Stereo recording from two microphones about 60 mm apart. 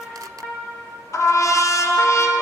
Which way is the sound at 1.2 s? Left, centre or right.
Left.